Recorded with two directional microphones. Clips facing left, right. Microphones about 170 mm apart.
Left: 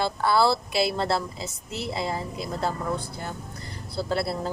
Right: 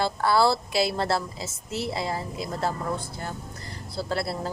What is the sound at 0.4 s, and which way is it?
Speech, centre (ahead or behind).